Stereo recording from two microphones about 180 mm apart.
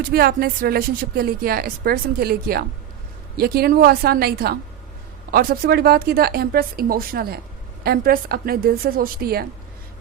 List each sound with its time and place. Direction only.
0.1 s a woman's voice: 55° right (ahead or behind)